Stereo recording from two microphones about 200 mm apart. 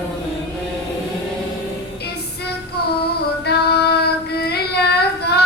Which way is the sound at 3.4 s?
55° left (ahead or behind).